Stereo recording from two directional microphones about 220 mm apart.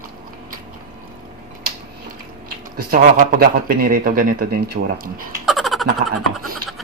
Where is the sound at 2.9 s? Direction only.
40° right (ahead or behind).